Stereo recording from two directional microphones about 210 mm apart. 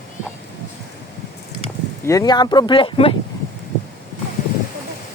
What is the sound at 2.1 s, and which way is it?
Speech, 20° left (ahead or behind).